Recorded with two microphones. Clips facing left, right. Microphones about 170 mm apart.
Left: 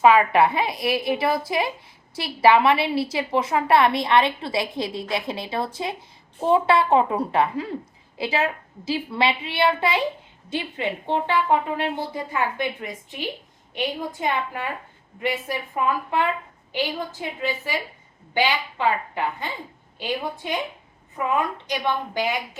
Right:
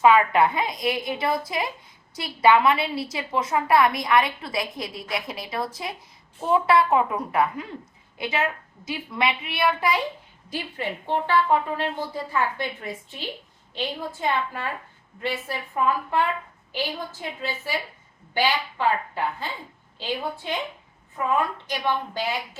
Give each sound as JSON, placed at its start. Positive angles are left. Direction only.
{"t": 0.0, "sound": "a woman's voice", "side_deg": 25}
{"t": 13.7, "sound": "a woman's voice", "side_deg": 15}